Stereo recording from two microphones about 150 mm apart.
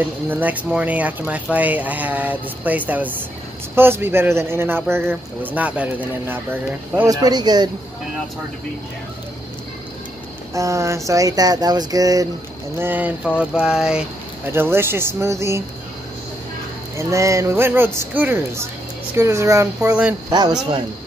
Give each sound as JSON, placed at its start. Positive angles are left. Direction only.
{"t": 0.3, "sound": "speech", "side_deg": -10}
{"t": 7.1, "sound": "speech", "side_deg": -25}
{"t": 10.5, "sound": "speech", "side_deg": -20}
{"t": 12.7, "sound": "speech", "side_deg": -15}
{"t": 16.9, "sound": "speech", "side_deg": -20}
{"t": 20.2, "sound": "speech", "side_deg": -25}